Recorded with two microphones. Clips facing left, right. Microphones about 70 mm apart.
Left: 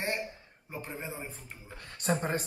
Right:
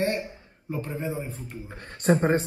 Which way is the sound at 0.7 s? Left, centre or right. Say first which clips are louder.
Right 9 dB; centre.